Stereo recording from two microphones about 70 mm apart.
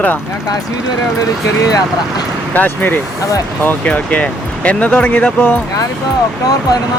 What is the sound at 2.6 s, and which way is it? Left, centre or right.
Speech, left.